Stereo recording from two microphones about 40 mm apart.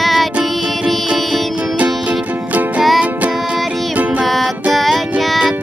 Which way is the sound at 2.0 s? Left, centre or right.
Right.